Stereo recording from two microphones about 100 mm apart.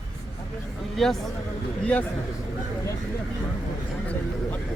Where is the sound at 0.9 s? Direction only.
Centre (ahead or behind).